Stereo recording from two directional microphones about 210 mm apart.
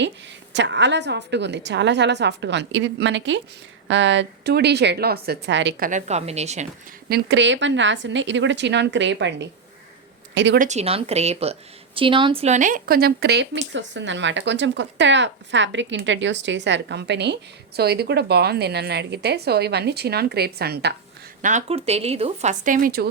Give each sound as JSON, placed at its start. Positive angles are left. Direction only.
{"t": 0.5, "sound": "a woman's voice", "side_deg": -60}
{"t": 5.8, "sound": "speech", "side_deg": -35}
{"t": 7.1, "sound": "speech", "side_deg": -55}
{"t": 10.6, "sound": "a woman's voice", "side_deg": -30}
{"t": 21.4, "sound": "speech", "side_deg": -30}